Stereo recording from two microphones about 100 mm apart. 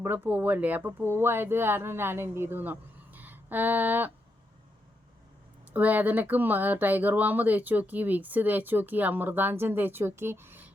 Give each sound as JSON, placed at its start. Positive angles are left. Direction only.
{"t": 0.0, "sound": "speech", "side_deg": -20}
{"t": 5.6, "sound": "speech", "side_deg": -15}